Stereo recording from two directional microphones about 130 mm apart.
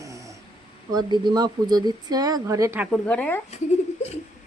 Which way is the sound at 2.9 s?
10° left (ahead or behind).